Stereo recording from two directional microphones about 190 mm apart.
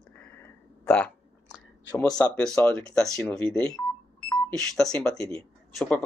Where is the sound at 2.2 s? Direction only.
5° left (ahead or behind).